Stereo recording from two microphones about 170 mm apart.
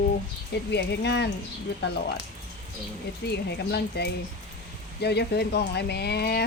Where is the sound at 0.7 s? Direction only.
85° left.